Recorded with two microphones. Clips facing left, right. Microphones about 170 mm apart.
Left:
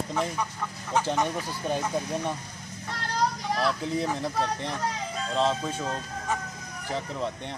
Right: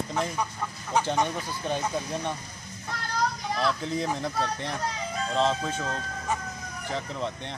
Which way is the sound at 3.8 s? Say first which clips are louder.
Left 1 dB; 5° left (ahead or behind).